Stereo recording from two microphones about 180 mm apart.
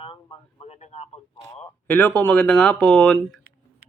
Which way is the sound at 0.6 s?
35° left (ahead or behind).